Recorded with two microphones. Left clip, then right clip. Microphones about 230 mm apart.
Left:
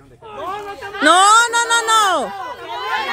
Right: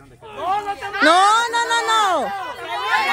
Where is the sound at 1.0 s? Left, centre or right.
Centre.